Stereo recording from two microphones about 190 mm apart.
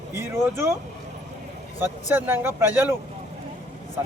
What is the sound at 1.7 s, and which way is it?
Speech, 10° right (ahead or behind).